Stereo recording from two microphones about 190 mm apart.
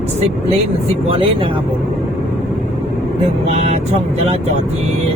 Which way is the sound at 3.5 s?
35° right (ahead or behind).